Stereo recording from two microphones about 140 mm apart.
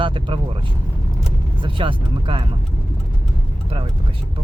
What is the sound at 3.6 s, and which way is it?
Speech, 45° right (ahead or behind).